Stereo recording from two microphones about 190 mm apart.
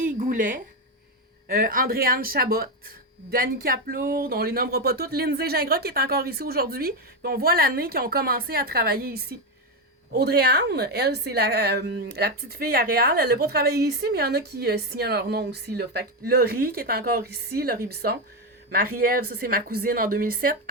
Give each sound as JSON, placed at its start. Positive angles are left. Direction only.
{"t": 0.0, "sound": "a woman's voice", "side_deg": -45}